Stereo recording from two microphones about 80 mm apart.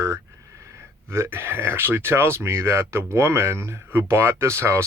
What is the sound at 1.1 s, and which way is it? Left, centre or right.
Speech, right.